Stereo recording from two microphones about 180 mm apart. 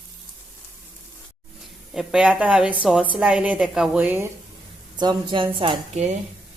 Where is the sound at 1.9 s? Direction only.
Centre (ahead or behind).